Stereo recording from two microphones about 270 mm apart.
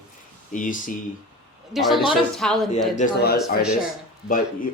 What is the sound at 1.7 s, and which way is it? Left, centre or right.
Speech, centre.